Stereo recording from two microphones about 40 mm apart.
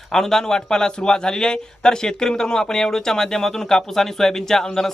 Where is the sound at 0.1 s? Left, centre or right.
Centre.